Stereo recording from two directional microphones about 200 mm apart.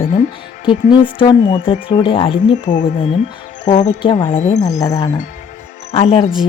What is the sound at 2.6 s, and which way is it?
Speech, 35° left (ahead or behind).